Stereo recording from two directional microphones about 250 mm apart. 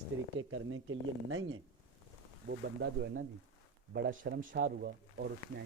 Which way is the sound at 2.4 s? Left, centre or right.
Right.